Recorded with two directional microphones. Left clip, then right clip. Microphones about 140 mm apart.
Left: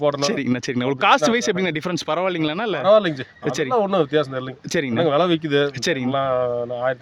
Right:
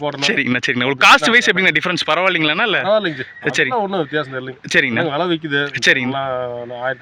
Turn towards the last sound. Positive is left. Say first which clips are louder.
# left 1 dB
turn(degrees=40)  # may be behind; listen again after turning